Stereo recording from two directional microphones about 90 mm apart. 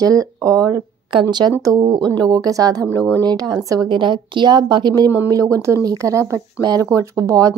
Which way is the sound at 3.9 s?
65° right (ahead or behind).